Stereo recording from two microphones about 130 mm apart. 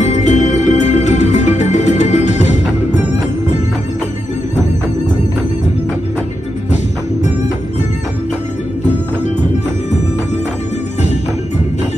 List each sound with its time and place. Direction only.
0.0 s music: 65° left (ahead or behind)